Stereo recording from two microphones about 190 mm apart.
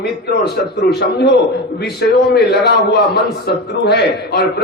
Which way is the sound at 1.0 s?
60° left (ahead or behind).